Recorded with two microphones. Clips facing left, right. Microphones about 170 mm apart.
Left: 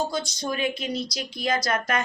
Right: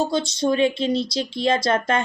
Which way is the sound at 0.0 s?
25° right (ahead or behind).